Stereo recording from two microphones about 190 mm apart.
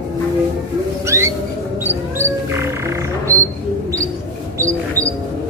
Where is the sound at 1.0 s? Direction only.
15° right (ahead or behind).